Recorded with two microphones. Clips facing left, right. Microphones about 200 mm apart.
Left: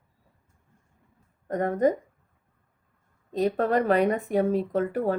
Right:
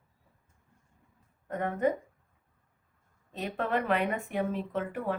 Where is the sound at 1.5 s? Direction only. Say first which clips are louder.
Left 6 dB; 40° left (ahead or behind).